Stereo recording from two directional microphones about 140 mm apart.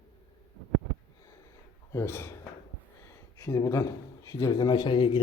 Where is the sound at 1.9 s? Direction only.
15° left (ahead or behind).